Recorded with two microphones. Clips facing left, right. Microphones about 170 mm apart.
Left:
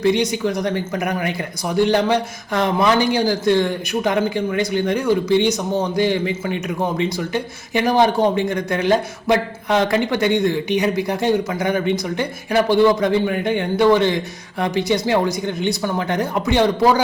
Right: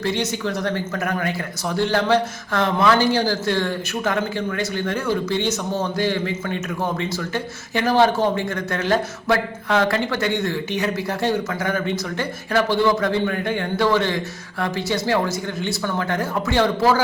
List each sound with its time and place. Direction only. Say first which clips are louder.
0.0 s speech: left 6 dB; 15° left (ahead or behind)